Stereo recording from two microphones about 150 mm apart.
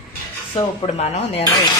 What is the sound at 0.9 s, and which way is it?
Speech, 45° left (ahead or behind).